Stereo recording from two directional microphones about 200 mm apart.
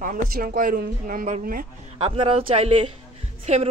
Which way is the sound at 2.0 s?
25° right (ahead or behind).